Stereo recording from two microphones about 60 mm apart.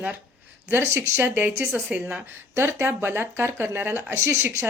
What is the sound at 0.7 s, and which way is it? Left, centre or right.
Speech, right.